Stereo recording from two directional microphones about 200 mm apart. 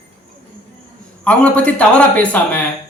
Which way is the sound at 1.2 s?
5° left (ahead or behind).